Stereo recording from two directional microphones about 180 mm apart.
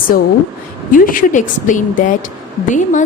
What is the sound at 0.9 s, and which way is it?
A woman's voice, 50° left (ahead or behind).